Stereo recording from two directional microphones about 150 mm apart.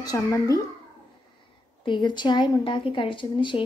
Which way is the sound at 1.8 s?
30° left (ahead or behind).